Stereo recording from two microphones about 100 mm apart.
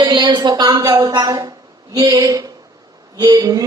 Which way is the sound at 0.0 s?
50° right (ahead or behind).